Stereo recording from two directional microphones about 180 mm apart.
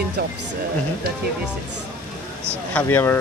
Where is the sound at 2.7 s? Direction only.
15° left (ahead or behind).